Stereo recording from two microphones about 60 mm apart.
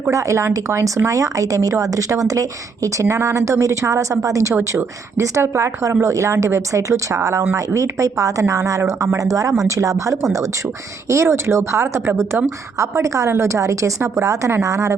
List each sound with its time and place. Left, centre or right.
0.1 s speech: right
11.1 s speech: right